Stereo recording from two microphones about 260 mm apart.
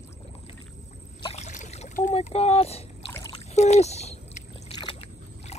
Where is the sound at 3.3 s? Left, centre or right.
Left.